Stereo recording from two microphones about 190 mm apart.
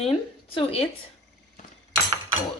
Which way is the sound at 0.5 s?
30° left (ahead or behind).